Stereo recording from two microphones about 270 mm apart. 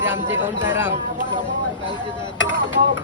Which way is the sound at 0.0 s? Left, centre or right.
Centre.